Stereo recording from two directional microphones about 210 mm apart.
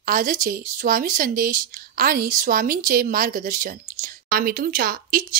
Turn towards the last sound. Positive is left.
turn(degrees=-45)  # may be behind; listen again after turning